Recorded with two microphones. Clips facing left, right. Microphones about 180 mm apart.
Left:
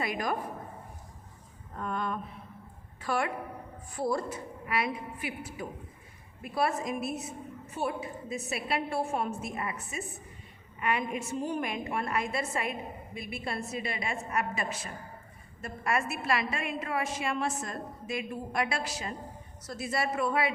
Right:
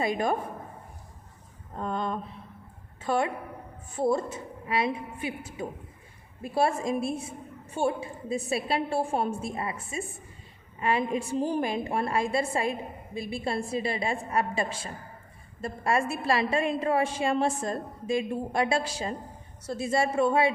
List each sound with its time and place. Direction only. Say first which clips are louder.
0.0 s a woman's voice: right 5 dB; 25° right (ahead or behind)
1.7 s a woman's voice: right 3 dB; 25° right (ahead or behind)